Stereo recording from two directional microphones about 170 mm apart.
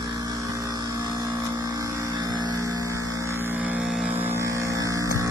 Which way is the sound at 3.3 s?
15° right (ahead or behind).